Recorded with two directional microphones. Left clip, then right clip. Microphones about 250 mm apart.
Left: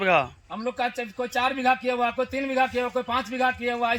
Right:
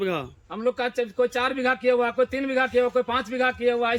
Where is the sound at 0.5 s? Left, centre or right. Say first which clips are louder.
Right 3 dB; centre.